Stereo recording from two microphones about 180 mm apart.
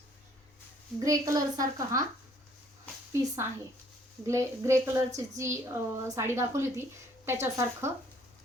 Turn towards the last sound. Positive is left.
turn(degrees=-15)  # may be behind; listen again after turning